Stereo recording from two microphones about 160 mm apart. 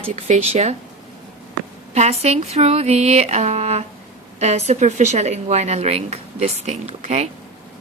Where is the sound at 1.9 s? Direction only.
45° right (ahead or behind).